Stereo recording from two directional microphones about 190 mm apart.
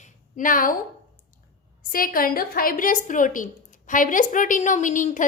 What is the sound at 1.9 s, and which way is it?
A woman's voice, 50° left (ahead or behind).